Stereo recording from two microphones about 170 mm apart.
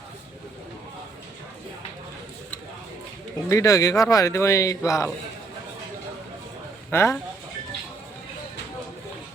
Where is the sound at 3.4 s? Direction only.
20° left (ahead or behind).